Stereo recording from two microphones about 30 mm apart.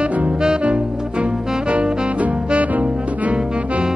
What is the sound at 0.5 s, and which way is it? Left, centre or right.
Music, right.